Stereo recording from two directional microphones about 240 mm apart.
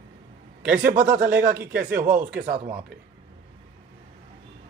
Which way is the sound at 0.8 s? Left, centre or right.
Right.